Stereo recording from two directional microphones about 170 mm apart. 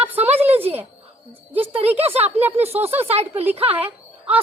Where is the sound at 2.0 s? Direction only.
35° right (ahead or behind).